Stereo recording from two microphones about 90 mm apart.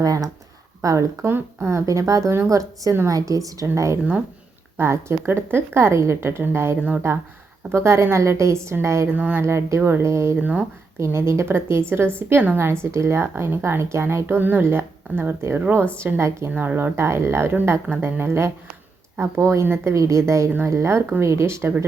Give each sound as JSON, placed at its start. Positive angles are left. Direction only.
{"t": 0.0, "sound": "speech", "side_deg": -40}
{"t": 4.8, "sound": "a woman's voice", "side_deg": -30}
{"t": 10.4, "sound": "speech", "side_deg": -15}
{"t": 11.0, "sound": "a woman's voice", "side_deg": -30}